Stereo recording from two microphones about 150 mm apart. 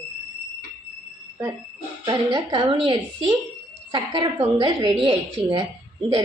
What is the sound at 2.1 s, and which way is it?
A woman's voice, 30° right (ahead or behind).